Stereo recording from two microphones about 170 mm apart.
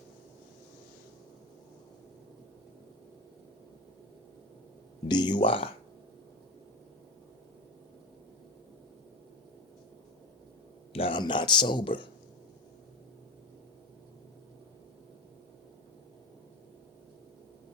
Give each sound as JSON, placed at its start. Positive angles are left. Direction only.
{"t": 5.0, "sound": "speech", "side_deg": 25}
{"t": 10.9, "sound": "speech", "side_deg": 30}